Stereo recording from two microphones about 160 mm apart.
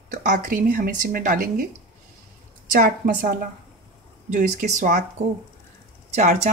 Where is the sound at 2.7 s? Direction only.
55° right (ahead or behind).